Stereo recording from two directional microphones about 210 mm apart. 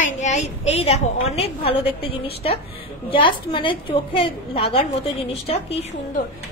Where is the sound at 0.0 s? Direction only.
35° left (ahead or behind).